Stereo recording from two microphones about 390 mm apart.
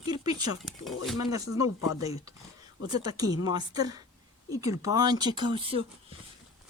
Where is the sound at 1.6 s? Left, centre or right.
Left.